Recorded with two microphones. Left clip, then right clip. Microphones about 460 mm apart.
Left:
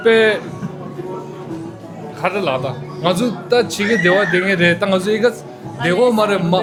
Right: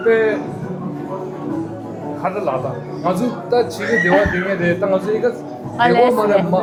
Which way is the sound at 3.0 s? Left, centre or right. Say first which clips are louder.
Left 2 dB; left.